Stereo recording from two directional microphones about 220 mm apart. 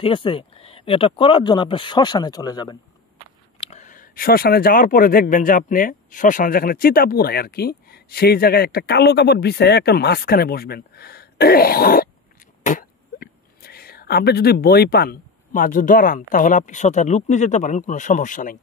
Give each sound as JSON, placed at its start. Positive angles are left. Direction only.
{"t": 0.0, "sound": "speech", "side_deg": 25}
{"t": 3.6, "sound": "speech", "side_deg": 30}